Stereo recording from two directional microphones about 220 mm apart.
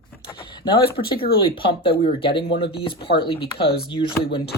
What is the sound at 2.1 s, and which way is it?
Speech, 25° left (ahead or behind).